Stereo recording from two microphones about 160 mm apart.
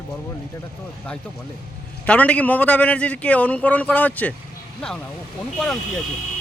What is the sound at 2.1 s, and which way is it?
A man's voice, 10° left (ahead or behind).